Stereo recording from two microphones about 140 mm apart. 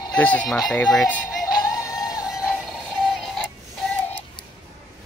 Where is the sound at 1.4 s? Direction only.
25° left (ahead or behind).